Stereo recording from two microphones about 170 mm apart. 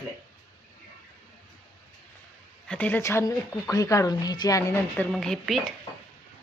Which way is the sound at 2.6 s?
10° left (ahead or behind).